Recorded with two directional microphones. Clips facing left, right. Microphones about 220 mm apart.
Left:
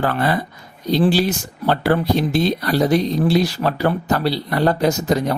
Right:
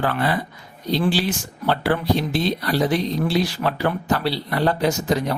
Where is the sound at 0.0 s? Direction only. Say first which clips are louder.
Left 3 dB; 45° left (ahead or behind).